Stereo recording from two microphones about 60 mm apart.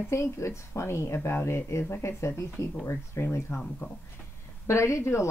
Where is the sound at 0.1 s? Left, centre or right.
Left.